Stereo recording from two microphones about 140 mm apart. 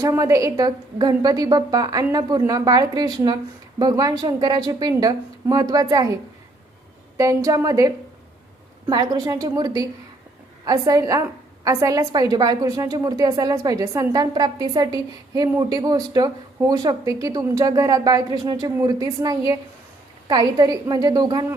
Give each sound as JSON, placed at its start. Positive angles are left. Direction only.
{"t": 0.0, "sound": "a woman's voice", "side_deg": -20}
{"t": 7.2, "sound": "a woman's voice", "side_deg": -25}